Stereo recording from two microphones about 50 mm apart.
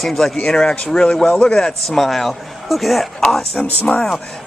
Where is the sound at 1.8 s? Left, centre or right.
Centre.